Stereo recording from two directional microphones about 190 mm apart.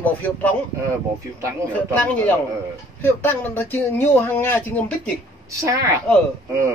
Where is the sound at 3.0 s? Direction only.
10° left (ahead or behind).